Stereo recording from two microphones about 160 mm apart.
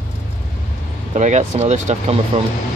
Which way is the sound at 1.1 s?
45° right (ahead or behind).